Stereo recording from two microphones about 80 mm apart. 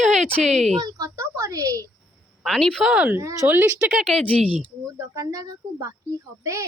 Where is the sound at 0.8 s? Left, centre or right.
Right.